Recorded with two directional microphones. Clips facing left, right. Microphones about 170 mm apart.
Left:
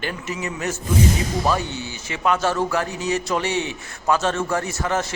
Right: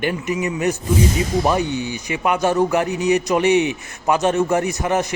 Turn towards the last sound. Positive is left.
turn(degrees=-15)  # may be behind; listen again after turning